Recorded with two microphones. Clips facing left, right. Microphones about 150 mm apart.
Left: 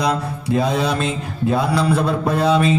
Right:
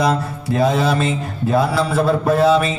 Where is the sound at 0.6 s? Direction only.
Centre (ahead or behind).